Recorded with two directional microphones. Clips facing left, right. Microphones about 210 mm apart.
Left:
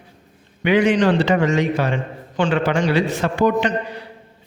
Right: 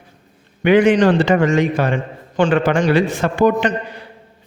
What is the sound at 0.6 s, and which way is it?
A man's voice, 50° right (ahead or behind).